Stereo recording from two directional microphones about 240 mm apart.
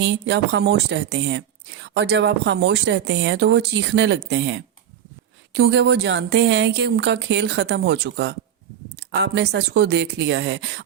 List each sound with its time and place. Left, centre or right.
0.0 s speech: right